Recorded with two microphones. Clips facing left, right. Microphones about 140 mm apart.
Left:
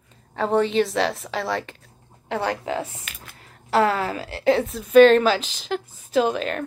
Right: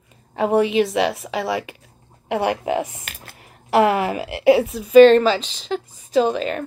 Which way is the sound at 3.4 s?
15° right (ahead or behind).